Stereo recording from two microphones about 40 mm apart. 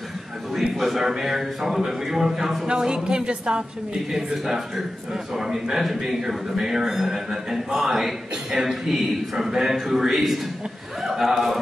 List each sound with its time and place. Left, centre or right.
0.5 s a man's voice: centre; by 3.6 s right
4.1 s a man's voice: centre